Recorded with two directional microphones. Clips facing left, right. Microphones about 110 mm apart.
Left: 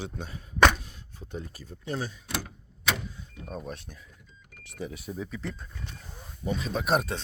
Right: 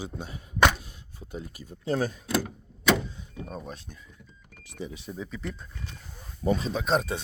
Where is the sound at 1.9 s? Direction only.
45° right (ahead or behind).